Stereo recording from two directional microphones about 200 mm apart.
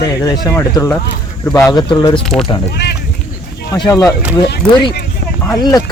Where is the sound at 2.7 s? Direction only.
55° left (ahead or behind).